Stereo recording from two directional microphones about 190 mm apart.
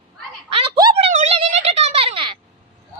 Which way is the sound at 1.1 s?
35° right (ahead or behind).